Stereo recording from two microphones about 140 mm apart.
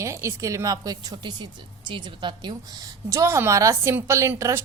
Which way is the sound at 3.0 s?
20° right (ahead or behind).